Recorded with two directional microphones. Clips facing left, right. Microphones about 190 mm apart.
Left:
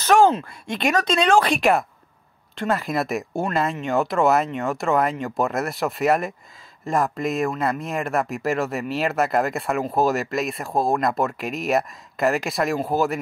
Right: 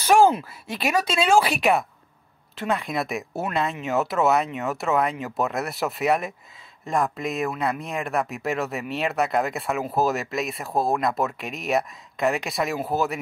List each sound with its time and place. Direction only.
0.0 s speech: 10° right (ahead or behind)